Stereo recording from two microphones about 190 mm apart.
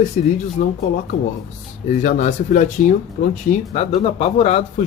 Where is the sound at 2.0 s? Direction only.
45° left (ahead or behind).